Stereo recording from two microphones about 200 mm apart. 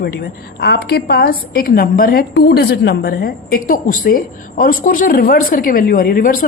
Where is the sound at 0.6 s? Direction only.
55° left (ahead or behind).